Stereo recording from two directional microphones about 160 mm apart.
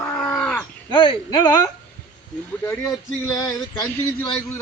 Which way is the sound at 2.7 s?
20° left (ahead or behind).